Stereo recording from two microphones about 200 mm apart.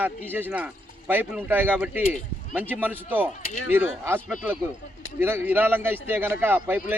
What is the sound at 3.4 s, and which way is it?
Speech, 40° left (ahead or behind).